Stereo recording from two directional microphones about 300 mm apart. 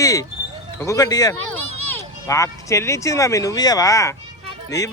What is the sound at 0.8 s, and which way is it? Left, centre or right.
Speech, centre.